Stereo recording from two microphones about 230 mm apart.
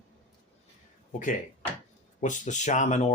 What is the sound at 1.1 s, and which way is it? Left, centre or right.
Speech, left.